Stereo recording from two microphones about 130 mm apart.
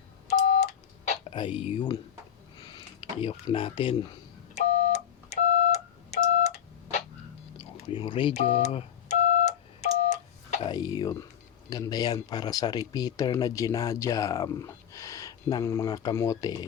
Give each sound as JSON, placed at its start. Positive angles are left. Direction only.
{"t": 0.3, "sound": "telephone dialing", "side_deg": 60}
{"t": 1.4, "sound": "speech", "side_deg": 40}
{"t": 2.6, "sound": "a sound", "side_deg": 35}
{"t": 4.5, "sound": "a sound", "side_deg": 60}
{"t": 7.9, "sound": "speech", "side_deg": 40}
{"t": 8.4, "sound": "telephone dialing", "side_deg": 50}
{"t": 10.7, "sound": "speech", "side_deg": 30}